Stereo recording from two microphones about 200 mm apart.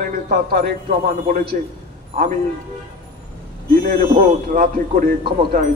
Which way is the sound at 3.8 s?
45° right (ahead or behind).